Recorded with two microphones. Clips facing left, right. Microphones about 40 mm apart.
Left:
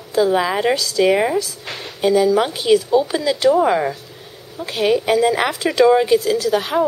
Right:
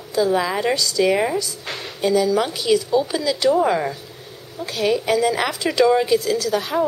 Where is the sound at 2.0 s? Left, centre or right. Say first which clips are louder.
Left 3 dB; left.